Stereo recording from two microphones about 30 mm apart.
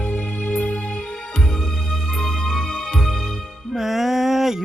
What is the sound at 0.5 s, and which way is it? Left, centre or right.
Music, left.